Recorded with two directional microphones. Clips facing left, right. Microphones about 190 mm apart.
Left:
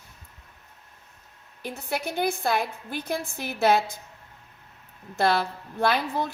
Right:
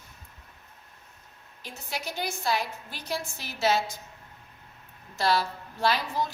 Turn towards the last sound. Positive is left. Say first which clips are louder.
# left 2 dB
turn(degrees=55)  # may be behind; listen again after turning